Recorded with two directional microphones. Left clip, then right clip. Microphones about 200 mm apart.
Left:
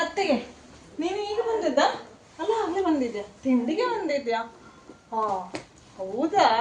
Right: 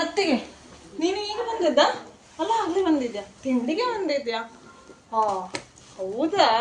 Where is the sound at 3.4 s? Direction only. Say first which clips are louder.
Even; 5° left (ahead or behind).